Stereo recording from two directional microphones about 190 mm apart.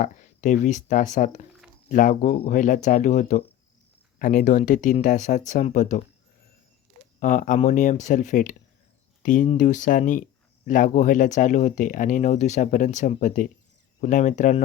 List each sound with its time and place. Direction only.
0.0 s speech: 40° left (ahead or behind)
7.2 s speech: 45° left (ahead or behind)